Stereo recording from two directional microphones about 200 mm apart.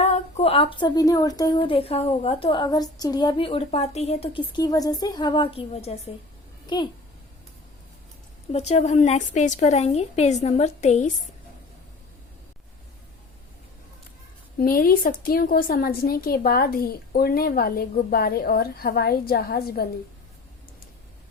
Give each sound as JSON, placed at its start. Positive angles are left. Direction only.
{"t": 0.0, "sound": "a woman's voice", "side_deg": 35}
{"t": 8.5, "sound": "a woman's voice", "side_deg": 30}
{"t": 14.6, "sound": "a woman's voice", "side_deg": 45}